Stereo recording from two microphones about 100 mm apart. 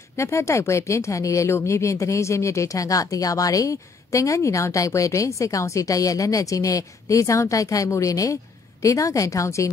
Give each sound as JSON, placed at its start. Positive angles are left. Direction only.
{"t": 0.1, "sound": "a woman's voice", "side_deg": 30}